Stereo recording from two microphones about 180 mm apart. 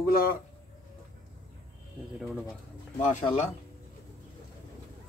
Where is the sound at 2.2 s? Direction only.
Centre (ahead or behind).